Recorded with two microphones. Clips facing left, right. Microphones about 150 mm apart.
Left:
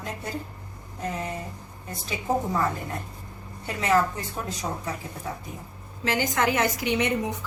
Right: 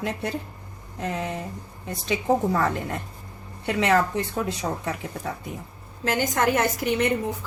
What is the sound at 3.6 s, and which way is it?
Speech, 75° right (ahead or behind).